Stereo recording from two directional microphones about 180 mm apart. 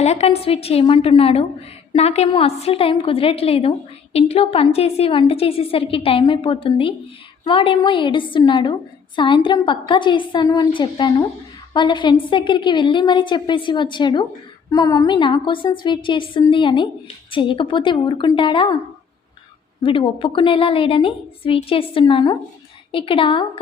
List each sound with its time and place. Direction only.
0.0 s a woman's voice: 35° left (ahead or behind)
19.8 s a woman's voice: 30° left (ahead or behind)